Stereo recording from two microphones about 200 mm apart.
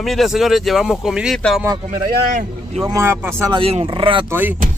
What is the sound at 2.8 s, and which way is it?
Speech, 10° right (ahead or behind).